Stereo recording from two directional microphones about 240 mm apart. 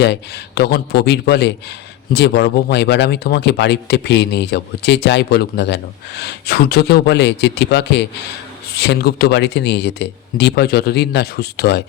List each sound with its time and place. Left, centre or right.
0.0 s speech: left